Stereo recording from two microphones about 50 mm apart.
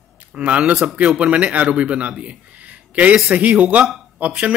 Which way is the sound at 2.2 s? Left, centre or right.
Right.